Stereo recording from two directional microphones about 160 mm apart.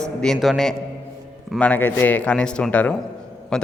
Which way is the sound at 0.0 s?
5° left (ahead or behind).